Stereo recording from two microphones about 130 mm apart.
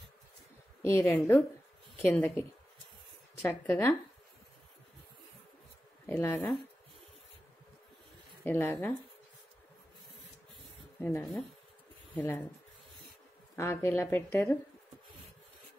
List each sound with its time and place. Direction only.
0.8 s a woman's voice: 20° left (ahead or behind)
3.4 s a woman's voice: 15° left (ahead or behind)
6.0 s a woman's voice: 15° left (ahead or behind)
8.5 s a woman's voice: 20° left (ahead or behind)
11.0 s a woman's voice: 15° left (ahead or behind)
13.6 s speech: 20° left (ahead or behind)